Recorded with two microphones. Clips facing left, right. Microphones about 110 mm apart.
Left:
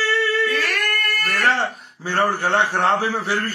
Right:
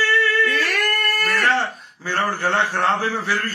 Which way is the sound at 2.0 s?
25° left (ahead or behind).